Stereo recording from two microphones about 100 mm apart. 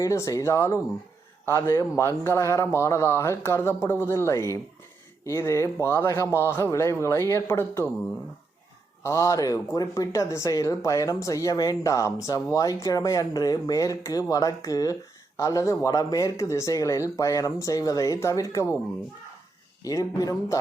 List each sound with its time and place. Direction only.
0.0 s speech: 30° left (ahead or behind)
9.0 s speech: 30° left (ahead or behind)
19.8 s speech: 35° left (ahead or behind)